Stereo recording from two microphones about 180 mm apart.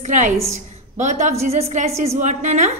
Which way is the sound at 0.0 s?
40° right (ahead or behind).